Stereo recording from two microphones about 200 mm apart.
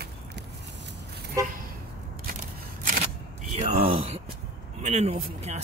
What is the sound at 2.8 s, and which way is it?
Single-lens reflex camera, 40° right (ahead or behind).